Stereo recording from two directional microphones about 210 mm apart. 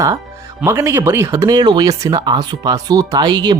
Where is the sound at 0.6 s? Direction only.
10° right (ahead or behind).